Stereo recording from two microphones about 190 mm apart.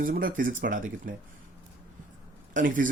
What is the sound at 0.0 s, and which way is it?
Speech, 45° right (ahead or behind).